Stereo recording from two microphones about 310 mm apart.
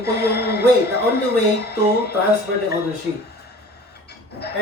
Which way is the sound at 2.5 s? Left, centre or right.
Right.